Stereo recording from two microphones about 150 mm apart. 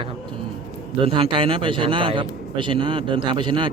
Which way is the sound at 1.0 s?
35° right (ahead or behind).